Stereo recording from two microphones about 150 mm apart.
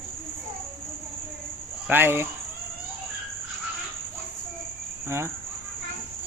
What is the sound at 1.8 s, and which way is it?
Cricket, 15° right (ahead or behind).